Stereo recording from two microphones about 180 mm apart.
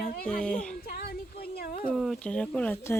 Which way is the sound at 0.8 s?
60° left (ahead or behind).